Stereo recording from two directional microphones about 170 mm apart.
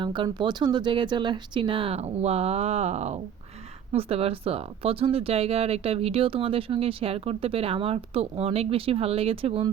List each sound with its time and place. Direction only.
0.0 s speech: 25° right (ahead or behind)